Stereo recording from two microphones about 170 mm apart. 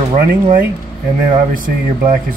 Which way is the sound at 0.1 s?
45° right (ahead or behind).